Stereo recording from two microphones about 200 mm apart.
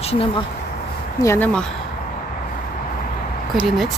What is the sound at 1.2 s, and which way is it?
Speech, 10° left (ahead or behind).